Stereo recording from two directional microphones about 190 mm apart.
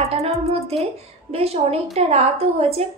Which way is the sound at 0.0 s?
35° right (ahead or behind).